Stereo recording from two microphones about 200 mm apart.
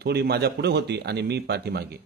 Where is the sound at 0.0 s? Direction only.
55° right (ahead or behind).